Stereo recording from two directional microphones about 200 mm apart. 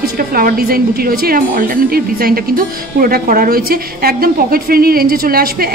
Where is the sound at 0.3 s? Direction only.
45° right (ahead or behind).